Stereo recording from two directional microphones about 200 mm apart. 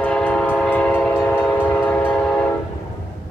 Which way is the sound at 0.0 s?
5° left (ahead or behind).